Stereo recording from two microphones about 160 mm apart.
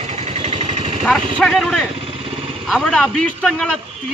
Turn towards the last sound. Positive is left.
turn(degrees=0)  # may be behind; listen again after turning